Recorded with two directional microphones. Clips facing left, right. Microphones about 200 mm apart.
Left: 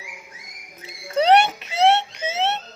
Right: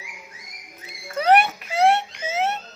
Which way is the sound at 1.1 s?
25° left (ahead or behind).